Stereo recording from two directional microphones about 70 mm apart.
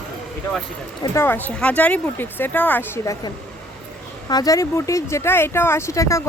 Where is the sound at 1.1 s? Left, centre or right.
Left.